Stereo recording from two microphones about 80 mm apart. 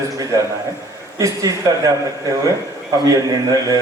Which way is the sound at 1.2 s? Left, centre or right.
Right.